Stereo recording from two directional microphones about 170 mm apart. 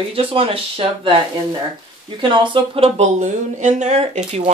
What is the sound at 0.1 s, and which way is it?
Speech, 35° right (ahead or behind).